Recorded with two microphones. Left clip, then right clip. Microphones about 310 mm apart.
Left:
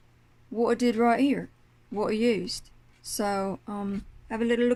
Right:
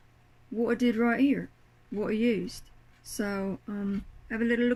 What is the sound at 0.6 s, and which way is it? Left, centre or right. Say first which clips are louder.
Speech: left 4 dB; centre.